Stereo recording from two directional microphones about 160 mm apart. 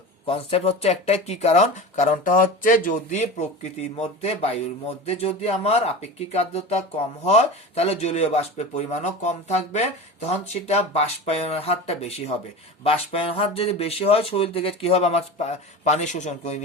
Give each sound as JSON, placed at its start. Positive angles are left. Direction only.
{"t": 0.3, "sound": "speech", "side_deg": 35}